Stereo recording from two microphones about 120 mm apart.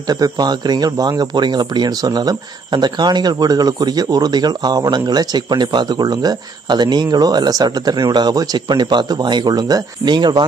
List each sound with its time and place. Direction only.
0.1 s speech: 35° right (ahead or behind)